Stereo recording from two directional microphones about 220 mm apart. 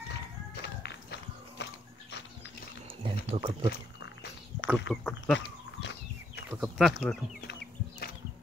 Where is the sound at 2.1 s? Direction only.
50° left (ahead or behind).